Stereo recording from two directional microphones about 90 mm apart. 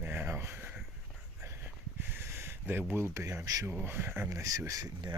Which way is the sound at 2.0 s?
25° right (ahead or behind).